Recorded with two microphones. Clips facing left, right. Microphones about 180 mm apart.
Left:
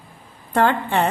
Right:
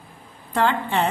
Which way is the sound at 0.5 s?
50° left (ahead or behind).